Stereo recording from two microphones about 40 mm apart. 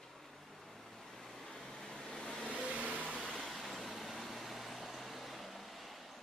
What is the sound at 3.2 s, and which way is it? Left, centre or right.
Vehicle, centre.